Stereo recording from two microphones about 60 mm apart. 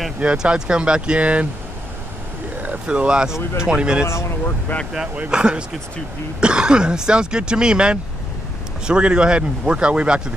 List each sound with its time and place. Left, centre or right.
0.2 s speech: centre
2.6 s speech: right
4.1 s speech: left
5.3 s speech: centre